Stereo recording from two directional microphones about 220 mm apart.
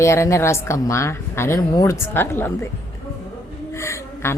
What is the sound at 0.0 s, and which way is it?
Speech, 15° left (ahead or behind).